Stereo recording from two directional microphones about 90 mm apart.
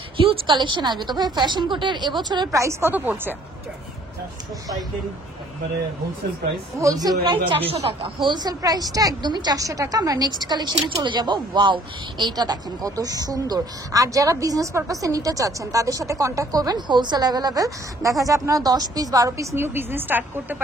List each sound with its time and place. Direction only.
0.5 s a woman's voice: 60° right (ahead or behind)
2.5 s speech: 30° right (ahead or behind)
6.8 s speech: 40° right (ahead or behind)
7.2 s a woman's voice: 80° right; by 20.6 s 20° right (ahead or behind)